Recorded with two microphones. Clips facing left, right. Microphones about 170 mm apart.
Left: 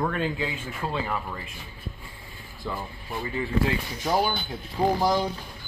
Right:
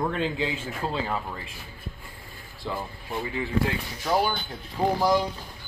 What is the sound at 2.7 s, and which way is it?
Speech, 20° right (ahead or behind).